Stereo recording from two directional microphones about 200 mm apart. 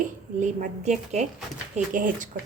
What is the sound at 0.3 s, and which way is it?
A woman's voice, 40° right (ahead or behind).